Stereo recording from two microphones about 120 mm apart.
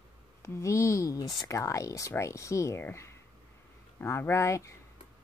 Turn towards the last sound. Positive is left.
turn(degrees=25)  # may be behind; listen again after turning